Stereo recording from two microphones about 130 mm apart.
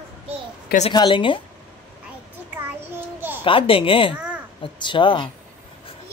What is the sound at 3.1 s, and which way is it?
Babbling, 15° right (ahead or behind).